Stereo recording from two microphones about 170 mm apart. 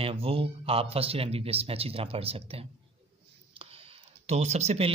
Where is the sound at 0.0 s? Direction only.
35° right (ahead or behind).